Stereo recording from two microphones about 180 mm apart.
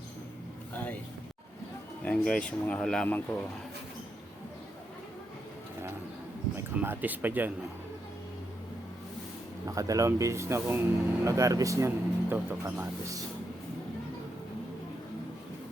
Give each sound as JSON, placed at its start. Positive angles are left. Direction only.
{"t": 0.7, "sound": "vehicle", "side_deg": 10}
{"t": 2.0, "sound": "speech", "side_deg": 5}
{"t": 6.7, "sound": "speech", "side_deg": -10}
{"t": 9.6, "sound": "speech", "side_deg": -20}